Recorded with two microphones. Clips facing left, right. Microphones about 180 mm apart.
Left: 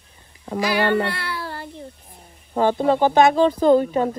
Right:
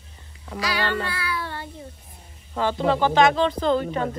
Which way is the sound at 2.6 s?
50° left (ahead or behind).